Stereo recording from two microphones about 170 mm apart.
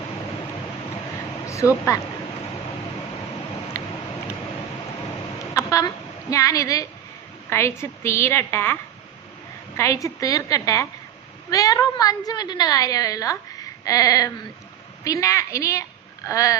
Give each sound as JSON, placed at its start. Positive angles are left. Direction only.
{"t": 1.5, "sound": "a woman's voice", "side_deg": 15}
{"t": 5.5, "sound": "a sound", "side_deg": 20}
{"t": 6.3, "sound": "a woman's voice", "side_deg": 20}